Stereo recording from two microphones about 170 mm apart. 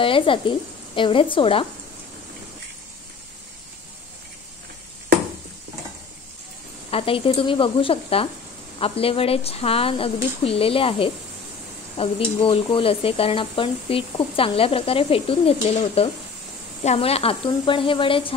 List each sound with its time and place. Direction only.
0.0 s speech: 30° left (ahead or behind)
6.9 s speech: 35° left (ahead or behind)